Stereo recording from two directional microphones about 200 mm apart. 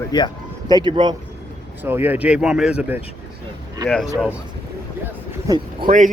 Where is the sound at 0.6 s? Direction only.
20° right (ahead or behind).